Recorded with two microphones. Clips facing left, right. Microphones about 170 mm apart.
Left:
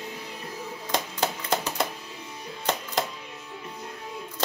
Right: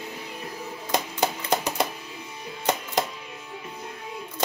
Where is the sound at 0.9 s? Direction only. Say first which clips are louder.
Right 2 dB; 15° right (ahead or behind).